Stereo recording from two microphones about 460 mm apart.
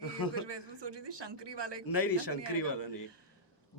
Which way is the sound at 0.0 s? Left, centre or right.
Left.